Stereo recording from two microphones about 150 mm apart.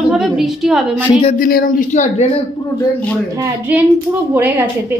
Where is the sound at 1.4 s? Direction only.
70° left (ahead or behind).